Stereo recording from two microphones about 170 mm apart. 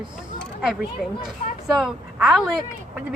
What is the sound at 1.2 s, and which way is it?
A woman's voice, 5° right (ahead or behind).